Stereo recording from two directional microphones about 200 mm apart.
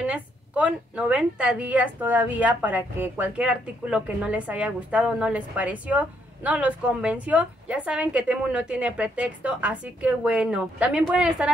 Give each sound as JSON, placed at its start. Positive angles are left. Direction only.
{"t": 0.0, "sound": "a woman's voice", "side_deg": -5}